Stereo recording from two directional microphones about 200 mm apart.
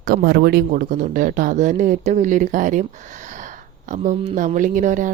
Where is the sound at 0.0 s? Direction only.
50° right (ahead or behind).